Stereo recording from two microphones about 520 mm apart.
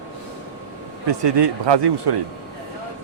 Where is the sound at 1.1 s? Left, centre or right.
Right.